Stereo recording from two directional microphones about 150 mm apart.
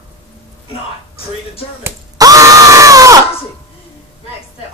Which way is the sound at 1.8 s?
20° right (ahead or behind).